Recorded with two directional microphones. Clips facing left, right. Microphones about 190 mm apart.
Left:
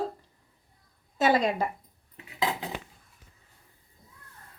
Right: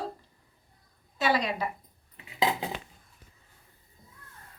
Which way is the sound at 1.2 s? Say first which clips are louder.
Left 4 dB; 50° left (ahead or behind).